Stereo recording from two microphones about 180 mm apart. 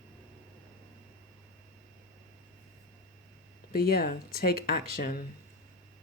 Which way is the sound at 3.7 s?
55° left (ahead or behind).